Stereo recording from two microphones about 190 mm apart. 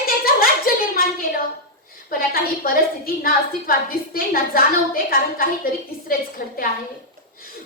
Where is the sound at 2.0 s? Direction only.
50° left (ahead or behind).